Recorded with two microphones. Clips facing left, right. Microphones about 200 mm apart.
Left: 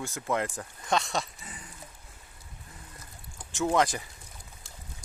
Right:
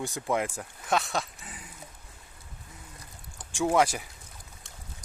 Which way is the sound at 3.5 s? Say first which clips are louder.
Right 1 dB; 10° right (ahead or behind).